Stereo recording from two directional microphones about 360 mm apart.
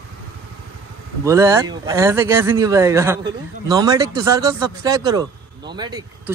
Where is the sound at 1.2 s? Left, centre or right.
Centre.